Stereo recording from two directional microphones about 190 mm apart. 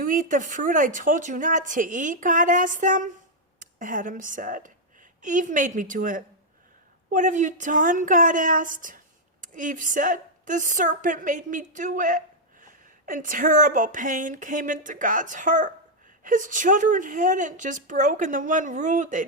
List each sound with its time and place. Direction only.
0.0 s a woman's voice: 45° right (ahead or behind)